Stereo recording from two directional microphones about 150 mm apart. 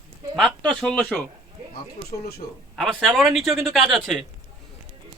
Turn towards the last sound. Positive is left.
turn(degrees=0)  # may be behind; listen again after turning